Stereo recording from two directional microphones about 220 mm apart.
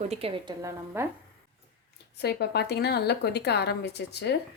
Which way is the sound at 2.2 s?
50° left (ahead or behind).